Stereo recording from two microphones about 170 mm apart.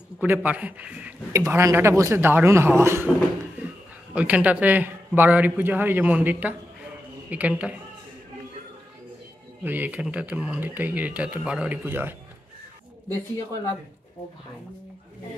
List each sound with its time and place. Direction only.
0.2 s speech: 10° right (ahead or behind)
1.3 s speech: 20° right (ahead or behind)
4.1 s speech: 5° right (ahead or behind)
9.6 s speech: 10° right (ahead or behind)